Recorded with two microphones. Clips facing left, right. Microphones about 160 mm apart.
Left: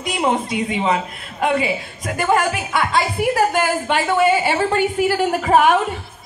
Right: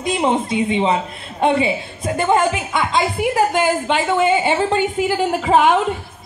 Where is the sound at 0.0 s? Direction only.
25° right (ahead or behind).